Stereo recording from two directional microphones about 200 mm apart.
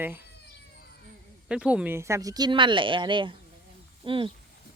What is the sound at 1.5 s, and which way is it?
Speech, 5° right (ahead or behind).